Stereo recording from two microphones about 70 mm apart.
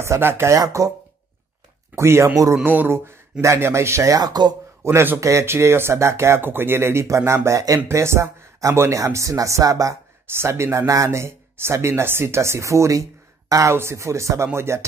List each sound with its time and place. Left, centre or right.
0.0 s speech: right
0.6 s speech: right
2.0 s speech: right
2.6 s speech: right
4.2 s speech: right
4.8 s speech: right
10.2 s speech: right